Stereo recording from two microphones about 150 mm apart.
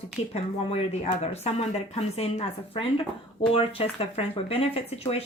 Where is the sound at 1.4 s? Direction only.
45° left (ahead or behind).